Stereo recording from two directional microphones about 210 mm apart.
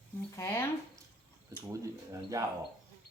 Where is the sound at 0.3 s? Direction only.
10° left (ahead or behind).